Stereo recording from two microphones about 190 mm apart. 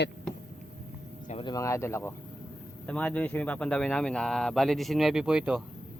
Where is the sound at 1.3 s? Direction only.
25° left (ahead or behind).